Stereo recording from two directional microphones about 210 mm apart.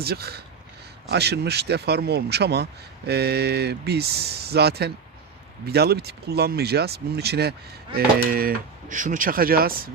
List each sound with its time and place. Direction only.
0.0 s speech: 50° right (ahead or behind)